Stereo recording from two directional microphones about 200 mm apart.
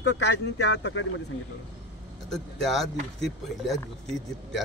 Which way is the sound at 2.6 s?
Centre (ahead or behind).